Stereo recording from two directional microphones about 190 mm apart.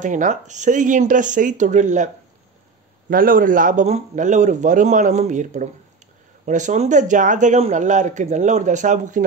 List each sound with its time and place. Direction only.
0.0 s speech: 40° right (ahead or behind)
3.1 s speech: 50° right (ahead or behind)